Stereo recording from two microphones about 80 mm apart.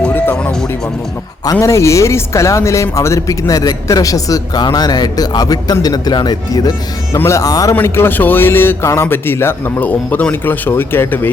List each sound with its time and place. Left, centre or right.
0.1 s music: left
1.6 s a man's voice: left
7.7 s a man's voice: left